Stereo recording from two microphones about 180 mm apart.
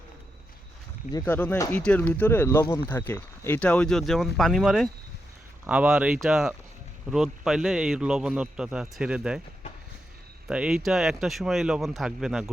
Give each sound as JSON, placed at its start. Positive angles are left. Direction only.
{"t": 1.2, "sound": "a man's voice", "side_deg": 10}
{"t": 10.5, "sound": "a man's voice", "side_deg": -5}